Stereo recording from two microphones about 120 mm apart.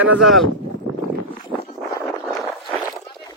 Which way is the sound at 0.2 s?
Centre (ahead or behind).